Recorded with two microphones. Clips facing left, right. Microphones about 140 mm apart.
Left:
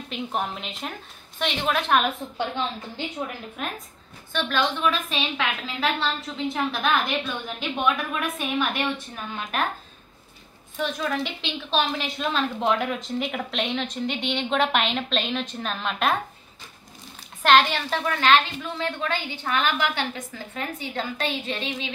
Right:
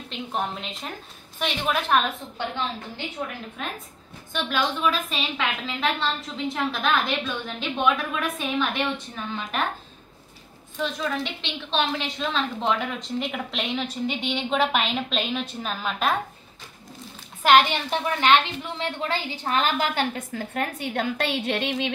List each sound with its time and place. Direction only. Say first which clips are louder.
0.1 s a woman's voice: even; 5° left (ahead or behind)
4.3 s a woman's voice: left 1 dB; 10° right (ahead or behind)
10.8 s a woman's voice: left 1 dB; 5° left (ahead or behind)
17.4 s a woman's voice: right 1 dB; 10° right (ahead or behind); by 19.1 s 25° right (ahead or behind)
19.3 s a woman's voice: right 2 dB; 35° right (ahead or behind); by 21.9 s 65° right (ahead or behind)